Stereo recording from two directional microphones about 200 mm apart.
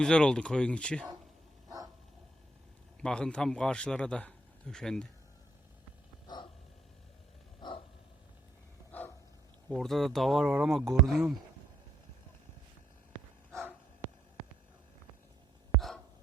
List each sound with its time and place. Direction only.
0.0 s speech: 5° left (ahead or behind)
3.0 s a man's voice: 5° left (ahead or behind)
6.2 s dog: 25° left (ahead or behind)
7.6 s dog: 20° left (ahead or behind)
8.9 s dog: 10° left (ahead or behind)
9.6 s speech: centre (ahead or behind)